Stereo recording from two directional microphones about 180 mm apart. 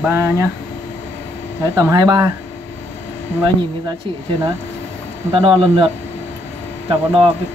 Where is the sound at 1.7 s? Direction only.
25° right (ahead or behind).